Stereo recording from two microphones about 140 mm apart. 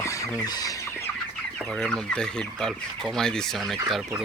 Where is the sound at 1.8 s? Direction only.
5° left (ahead or behind).